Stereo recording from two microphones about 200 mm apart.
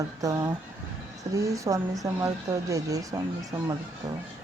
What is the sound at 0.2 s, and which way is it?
Speech, 15° right (ahead or behind).